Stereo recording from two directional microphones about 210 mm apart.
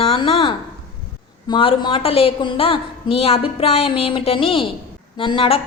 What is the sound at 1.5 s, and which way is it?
A woman's voice, 20° left (ahead or behind).